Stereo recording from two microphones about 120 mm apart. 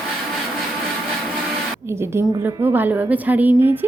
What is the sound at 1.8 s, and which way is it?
A woman's voice, 20° right (ahead or behind).